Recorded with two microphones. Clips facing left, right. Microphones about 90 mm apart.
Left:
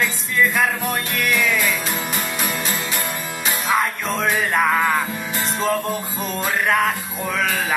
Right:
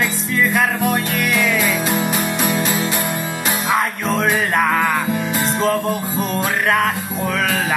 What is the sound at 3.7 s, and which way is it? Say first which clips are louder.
Music: right 2 dB; centre (ahead or behind).